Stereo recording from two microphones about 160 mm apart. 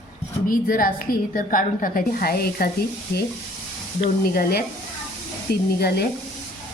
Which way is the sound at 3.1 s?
80° left.